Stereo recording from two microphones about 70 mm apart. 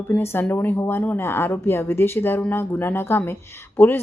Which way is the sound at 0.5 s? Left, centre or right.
Left.